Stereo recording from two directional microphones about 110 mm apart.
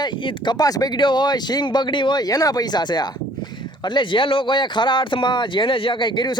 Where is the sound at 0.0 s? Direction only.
45° left (ahead or behind).